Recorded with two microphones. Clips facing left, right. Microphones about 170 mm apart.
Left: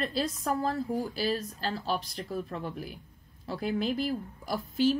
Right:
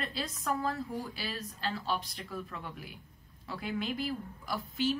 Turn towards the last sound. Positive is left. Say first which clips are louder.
# left 6 dB
turn(degrees=45)  # may be behind; listen again after turning